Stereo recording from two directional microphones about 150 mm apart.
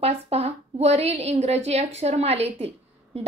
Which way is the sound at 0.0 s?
45° right (ahead or behind).